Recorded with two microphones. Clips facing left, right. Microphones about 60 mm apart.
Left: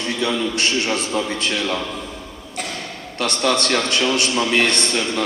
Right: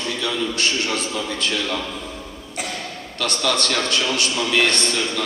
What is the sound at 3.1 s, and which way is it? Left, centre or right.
A man's voice, left.